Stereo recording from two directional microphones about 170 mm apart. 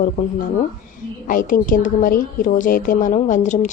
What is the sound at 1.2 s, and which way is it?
Speech, 55° left (ahead or behind).